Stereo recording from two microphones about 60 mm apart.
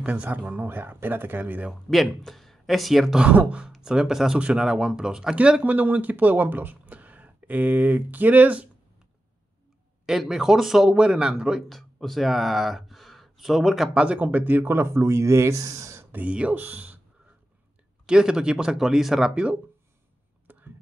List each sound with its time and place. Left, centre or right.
0.0 s speech: right
0.5 s speech: right
1.7 s speech: centre
3.2 s speech: right
10.0 s speech: centre
11.7 s speech: centre
13.9 s speech: centre; by 15.6 s right
15.6 s speech: right
16.0 s a sound: right
16.3 s speech: centre
16.5 s speech: right
18.0 s speech: centre
20.5 s a sound: right